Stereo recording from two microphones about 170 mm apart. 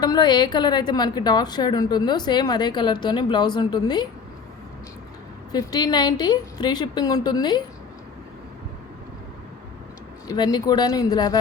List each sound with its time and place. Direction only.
0.0 s a woman's voice: 25° left (ahead or behind)
5.5 s a woman's voice: 25° left (ahead or behind)
10.2 s a woman's voice: 25° left (ahead or behind)